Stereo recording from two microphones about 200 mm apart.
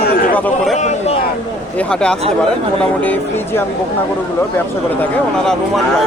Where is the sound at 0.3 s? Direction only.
5° left (ahead or behind).